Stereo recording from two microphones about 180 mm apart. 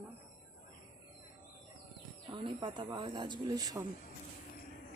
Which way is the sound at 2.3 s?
25° right (ahead or behind).